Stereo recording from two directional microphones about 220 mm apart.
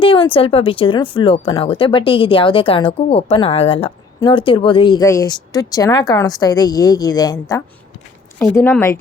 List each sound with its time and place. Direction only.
0.0 s speech: 25° left (ahead or behind)